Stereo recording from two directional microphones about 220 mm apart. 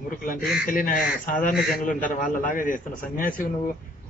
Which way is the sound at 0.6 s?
40° left (ahead or behind).